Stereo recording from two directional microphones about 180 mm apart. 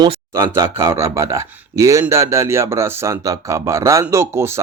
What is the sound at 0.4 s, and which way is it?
Speech, 20° right (ahead or behind).